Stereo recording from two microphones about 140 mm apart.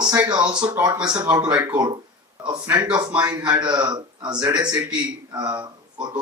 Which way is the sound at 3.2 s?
30° right (ahead or behind).